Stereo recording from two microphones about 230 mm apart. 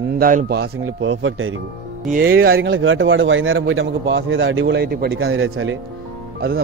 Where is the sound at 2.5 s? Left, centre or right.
Right.